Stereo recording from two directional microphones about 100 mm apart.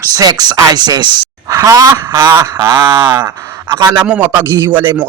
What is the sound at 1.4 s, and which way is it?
Speech, 35° right (ahead or behind).